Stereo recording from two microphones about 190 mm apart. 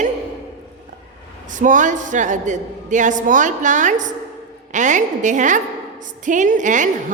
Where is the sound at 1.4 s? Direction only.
40° right (ahead or behind).